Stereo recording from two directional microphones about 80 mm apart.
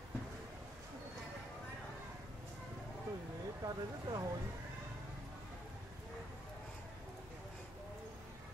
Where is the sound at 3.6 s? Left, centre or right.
Right.